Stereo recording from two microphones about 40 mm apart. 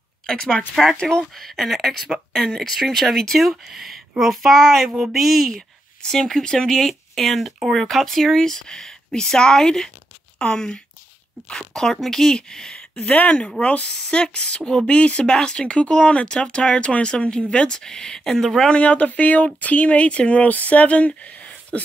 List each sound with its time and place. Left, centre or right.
0.3 s speech: centre
1.3 s speech: centre
6.0 s speech: centre
13.0 s speech: left
13.9 s speech: centre
18.4 s speech: centre
18.7 s speech: left
21.2 s a sound: left